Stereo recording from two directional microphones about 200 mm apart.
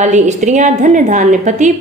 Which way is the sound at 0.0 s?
35° right (ahead or behind).